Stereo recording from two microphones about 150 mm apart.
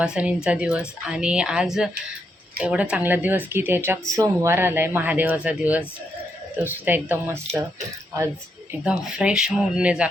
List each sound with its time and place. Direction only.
0.0 s a woman's voice: 5° right (ahead or behind)
8.8 s speech: 5° right (ahead or behind)